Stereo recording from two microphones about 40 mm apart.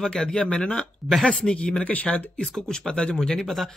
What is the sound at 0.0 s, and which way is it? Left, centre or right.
Speech, centre.